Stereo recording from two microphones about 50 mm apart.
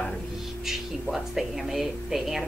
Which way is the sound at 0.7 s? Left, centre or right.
Centre.